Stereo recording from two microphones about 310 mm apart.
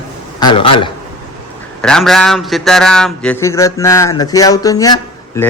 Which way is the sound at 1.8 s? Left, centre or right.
Centre.